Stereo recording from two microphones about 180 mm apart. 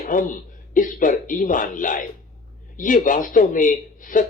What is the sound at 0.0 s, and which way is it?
A man's voice, 45° left (ahead or behind).